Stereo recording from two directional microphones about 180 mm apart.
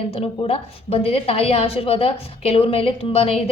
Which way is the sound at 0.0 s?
35° left (ahead or behind).